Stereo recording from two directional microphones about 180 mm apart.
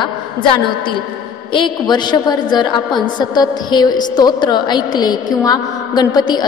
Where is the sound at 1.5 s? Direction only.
25° left (ahead or behind).